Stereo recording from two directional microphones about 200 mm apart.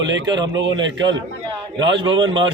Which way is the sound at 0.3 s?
20° right (ahead or behind).